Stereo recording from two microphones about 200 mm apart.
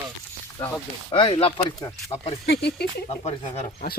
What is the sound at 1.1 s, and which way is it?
Speech, 25° left (ahead or behind).